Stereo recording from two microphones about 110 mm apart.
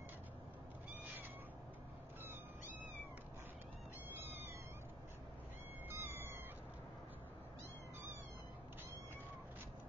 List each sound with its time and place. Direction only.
4.1 s cat: 20° right (ahead or behind)
5.9 s cat: 20° right (ahead or behind)